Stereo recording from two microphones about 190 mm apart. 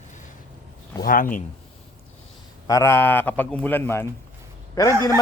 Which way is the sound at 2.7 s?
15° left (ahead or behind).